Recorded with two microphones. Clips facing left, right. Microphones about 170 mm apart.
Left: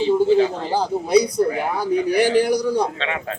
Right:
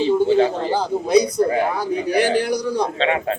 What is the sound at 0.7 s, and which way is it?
A man's voice, 10° left (ahead or behind).